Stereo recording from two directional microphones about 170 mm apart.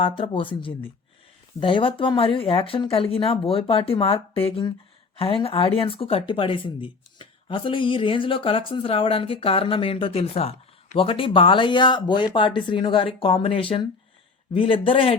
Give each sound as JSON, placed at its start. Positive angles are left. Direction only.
{"t": 0.0, "sound": "speech", "side_deg": 30}